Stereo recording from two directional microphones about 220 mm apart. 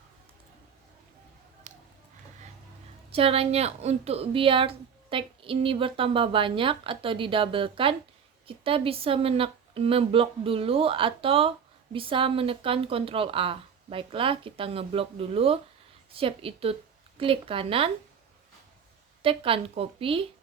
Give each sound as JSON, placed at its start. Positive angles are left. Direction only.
{"t": 1.7, "sound": "a sound", "side_deg": -30}
{"t": 3.1, "sound": "a woman's voice", "side_deg": -25}
{"t": 19.2, "sound": "a woman's voice", "side_deg": -25}